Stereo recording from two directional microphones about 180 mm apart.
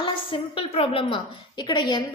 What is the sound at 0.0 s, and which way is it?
A woman's voice, 30° left (ahead or behind).